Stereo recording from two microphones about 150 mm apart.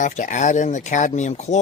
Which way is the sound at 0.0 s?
55° left (ahead or behind).